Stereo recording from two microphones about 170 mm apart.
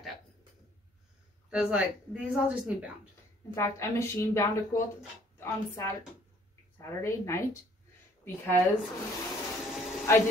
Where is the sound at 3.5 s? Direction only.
15° left (ahead or behind).